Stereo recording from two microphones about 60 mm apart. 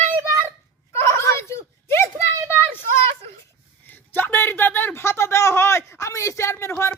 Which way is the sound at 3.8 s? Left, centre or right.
Left.